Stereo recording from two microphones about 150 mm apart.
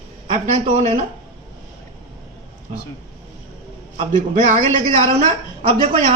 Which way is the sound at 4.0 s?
50° right (ahead or behind).